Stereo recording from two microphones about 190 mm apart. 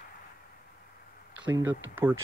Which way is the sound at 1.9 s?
10° right (ahead or behind).